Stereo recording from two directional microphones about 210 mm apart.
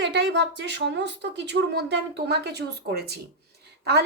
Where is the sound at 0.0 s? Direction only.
55° right (ahead or behind).